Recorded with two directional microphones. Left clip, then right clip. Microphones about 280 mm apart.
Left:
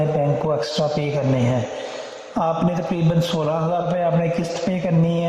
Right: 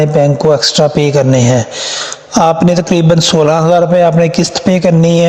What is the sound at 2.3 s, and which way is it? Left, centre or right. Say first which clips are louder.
Speech: right 12 dB; right.